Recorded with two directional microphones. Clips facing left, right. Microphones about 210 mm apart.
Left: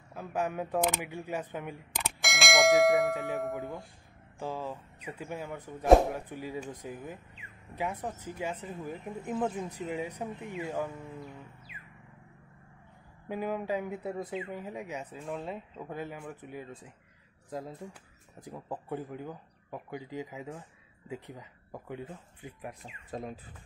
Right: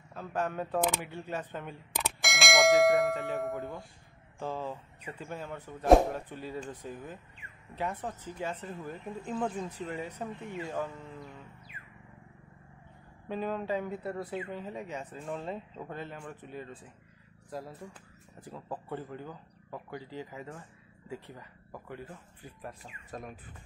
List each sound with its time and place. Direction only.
0.1 s speech: 10° left (ahead or behind)
2.1 s bell: centre (ahead or behind)
4.4 s speech: 10° left (ahead or behind)
13.3 s speech: 10° left (ahead or behind)
18.4 s speech: 15° left (ahead or behind)